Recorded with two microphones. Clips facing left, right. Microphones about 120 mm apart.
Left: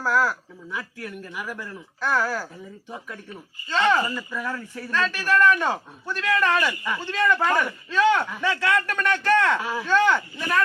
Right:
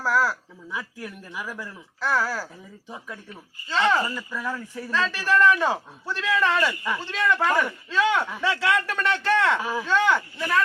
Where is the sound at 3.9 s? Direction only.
Centre (ahead or behind).